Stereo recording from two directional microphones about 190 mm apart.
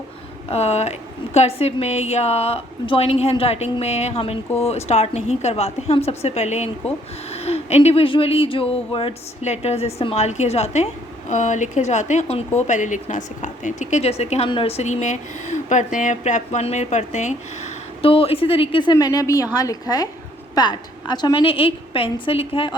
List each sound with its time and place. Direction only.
0.5 s a woman's voice: 35° left (ahead or behind)